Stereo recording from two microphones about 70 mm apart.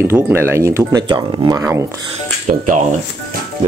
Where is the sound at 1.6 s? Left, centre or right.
Right.